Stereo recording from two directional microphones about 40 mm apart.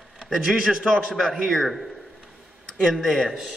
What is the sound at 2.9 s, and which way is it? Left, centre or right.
Speech, centre.